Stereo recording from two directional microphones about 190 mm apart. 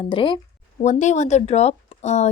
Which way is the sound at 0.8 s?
40° left (ahead or behind).